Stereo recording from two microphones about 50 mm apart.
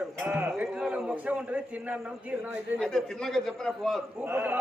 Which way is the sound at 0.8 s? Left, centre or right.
Centre.